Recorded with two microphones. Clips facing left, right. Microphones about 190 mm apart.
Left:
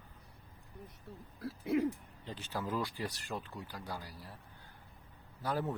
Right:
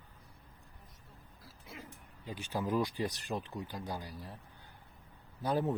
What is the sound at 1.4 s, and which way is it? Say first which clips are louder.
Owl: left 19 dB; 65° left (ahead or behind).